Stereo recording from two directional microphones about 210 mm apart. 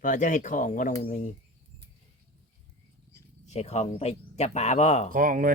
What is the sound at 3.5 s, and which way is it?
Speech, 30° left (ahead or behind).